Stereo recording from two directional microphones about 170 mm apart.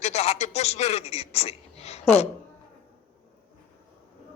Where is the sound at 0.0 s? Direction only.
40° left (ahead or behind).